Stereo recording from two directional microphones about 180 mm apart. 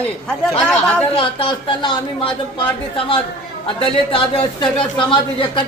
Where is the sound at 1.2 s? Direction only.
30° left (ahead or behind).